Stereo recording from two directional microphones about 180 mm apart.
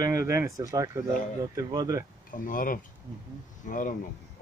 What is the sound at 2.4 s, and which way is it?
Speech, 50° left (ahead or behind).